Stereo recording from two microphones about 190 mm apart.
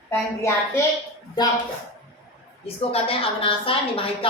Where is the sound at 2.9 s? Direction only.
30° left (ahead or behind).